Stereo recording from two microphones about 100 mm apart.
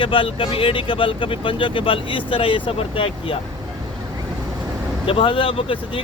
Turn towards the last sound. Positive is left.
turn(degrees=65)  # may be behind; listen again after turning